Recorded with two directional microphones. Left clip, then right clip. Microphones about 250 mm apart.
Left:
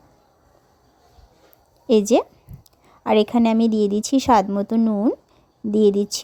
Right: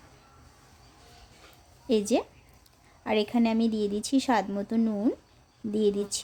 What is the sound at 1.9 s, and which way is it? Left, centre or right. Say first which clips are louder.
A woman's voice: left 10 dB; left.